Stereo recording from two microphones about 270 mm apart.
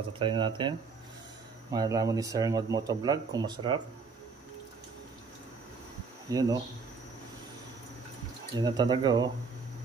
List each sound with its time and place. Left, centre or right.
0.2 s speech: centre
6.3 s speech: centre
8.5 s speech: centre